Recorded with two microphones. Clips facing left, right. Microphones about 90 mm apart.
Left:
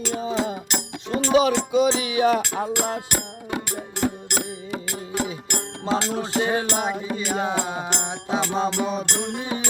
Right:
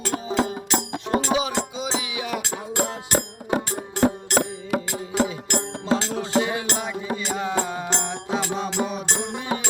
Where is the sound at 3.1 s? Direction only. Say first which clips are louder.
Right 5 dB; 35° right (ahead or behind).